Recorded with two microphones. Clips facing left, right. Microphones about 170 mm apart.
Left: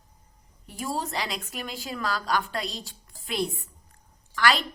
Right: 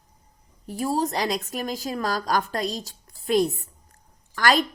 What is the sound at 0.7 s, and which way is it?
Speech, 40° right (ahead or behind).